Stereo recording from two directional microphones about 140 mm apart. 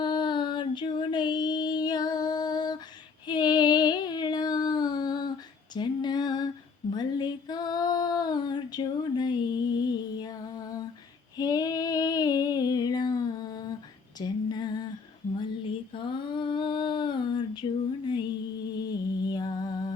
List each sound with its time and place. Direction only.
0.0 s female singing: 35° left (ahead or behind)
3.2 s child singing: 30° left (ahead or behind)
5.7 s female singing: 30° left (ahead or behind)
11.3 s female singing: 30° left (ahead or behind)
16.0 s a sound: 35° left (ahead or behind)
18.1 s music: 30° left (ahead or behind)